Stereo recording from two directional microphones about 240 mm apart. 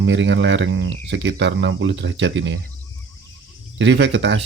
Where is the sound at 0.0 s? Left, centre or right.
Right.